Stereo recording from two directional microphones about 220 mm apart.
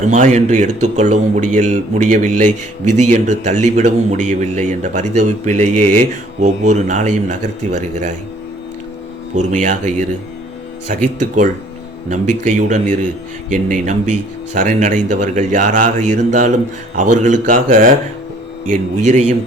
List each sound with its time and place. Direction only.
0.1 s a man's voice: 30° right (ahead or behind)
9.3 s a man's voice: 35° right (ahead or behind)
11.2 s a man's voice: 35° right (ahead or behind)